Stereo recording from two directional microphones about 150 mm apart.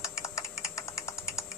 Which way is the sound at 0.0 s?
20° left (ahead or behind).